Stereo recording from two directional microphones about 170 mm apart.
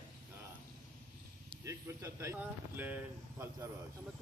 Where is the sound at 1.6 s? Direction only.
15° right (ahead or behind).